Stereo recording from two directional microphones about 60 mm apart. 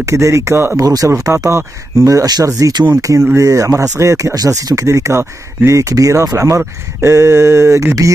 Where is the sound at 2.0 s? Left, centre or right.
Right.